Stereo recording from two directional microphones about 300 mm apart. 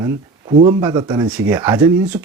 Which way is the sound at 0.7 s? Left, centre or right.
Centre.